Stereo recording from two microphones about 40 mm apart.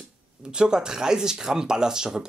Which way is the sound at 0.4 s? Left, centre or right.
Right.